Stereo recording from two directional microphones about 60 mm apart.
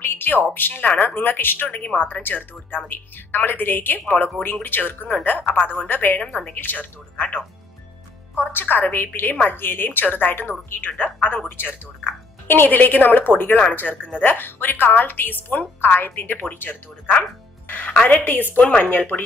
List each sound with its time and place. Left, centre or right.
0.0 s a woman's voice: left
6.2 s a woman's voice: centre
6.6 s speech: left
8.5 s a woman's voice: left